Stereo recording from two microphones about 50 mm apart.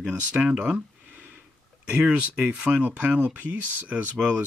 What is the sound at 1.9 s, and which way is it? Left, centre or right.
Speech, right.